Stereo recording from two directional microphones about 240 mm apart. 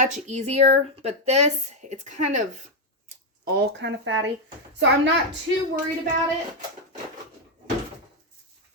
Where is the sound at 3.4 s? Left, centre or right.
Right.